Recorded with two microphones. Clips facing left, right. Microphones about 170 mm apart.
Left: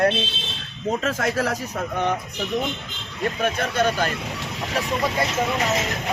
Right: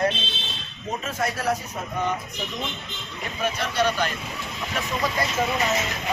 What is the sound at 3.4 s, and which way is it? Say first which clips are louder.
Speech: left 1 dB; 50° left (ahead or behind).